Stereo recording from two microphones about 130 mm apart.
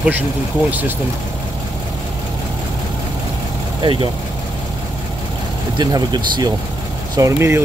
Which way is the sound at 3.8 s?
35° right (ahead or behind).